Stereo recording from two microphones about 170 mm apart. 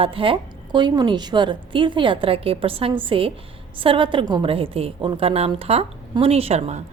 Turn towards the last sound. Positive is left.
turn(degrees=-40)  # may be behind; listen again after turning